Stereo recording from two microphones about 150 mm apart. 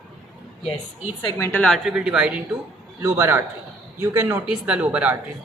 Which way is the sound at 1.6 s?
Centre (ahead or behind).